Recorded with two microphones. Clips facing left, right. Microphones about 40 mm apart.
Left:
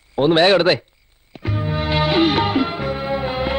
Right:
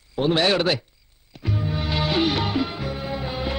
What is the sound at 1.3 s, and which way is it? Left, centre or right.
Music, left.